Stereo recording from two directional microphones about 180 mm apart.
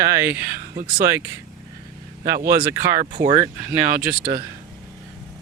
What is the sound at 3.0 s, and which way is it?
Speech, 45° right (ahead or behind).